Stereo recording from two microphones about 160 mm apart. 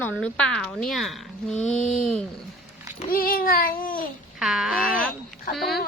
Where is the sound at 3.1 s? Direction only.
65° left (ahead or behind).